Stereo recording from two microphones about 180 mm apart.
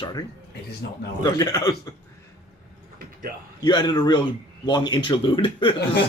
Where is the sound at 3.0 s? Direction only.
50° right (ahead or behind).